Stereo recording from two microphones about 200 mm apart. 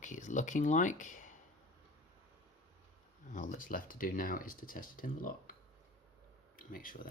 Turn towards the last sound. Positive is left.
turn(degrees=45)  # may be behind; listen again after turning